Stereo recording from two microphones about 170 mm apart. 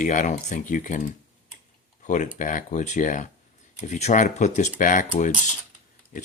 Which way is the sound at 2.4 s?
50° left (ahead or behind).